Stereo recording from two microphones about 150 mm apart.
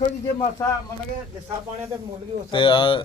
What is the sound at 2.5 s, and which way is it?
Speech, 35° left (ahead or behind).